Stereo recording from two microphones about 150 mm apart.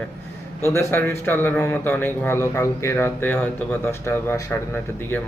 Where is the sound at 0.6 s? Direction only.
15° left (ahead or behind).